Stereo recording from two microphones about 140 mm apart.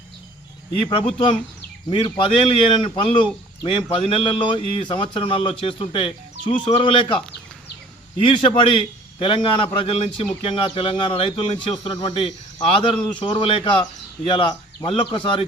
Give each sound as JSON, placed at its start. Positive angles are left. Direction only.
{"t": 0.9, "sound": "a man's voice", "side_deg": 40}
{"t": 8.2, "sound": "a man's voice", "side_deg": 40}
{"t": 14.8, "sound": "a man's voice", "side_deg": 40}